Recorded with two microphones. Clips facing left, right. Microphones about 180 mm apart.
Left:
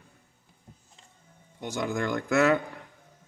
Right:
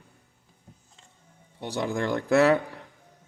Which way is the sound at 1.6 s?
35° right (ahead or behind).